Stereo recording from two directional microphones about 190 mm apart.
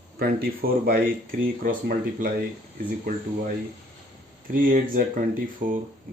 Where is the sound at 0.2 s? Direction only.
50° right (ahead or behind).